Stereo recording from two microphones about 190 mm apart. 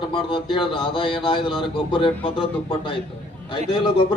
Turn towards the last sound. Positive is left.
turn(degrees=25)  # may be behind; listen again after turning